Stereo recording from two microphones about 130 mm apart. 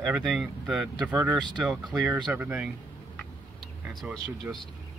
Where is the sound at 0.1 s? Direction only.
Centre (ahead or behind).